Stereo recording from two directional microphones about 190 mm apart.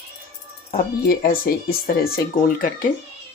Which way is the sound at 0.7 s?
50° left (ahead or behind).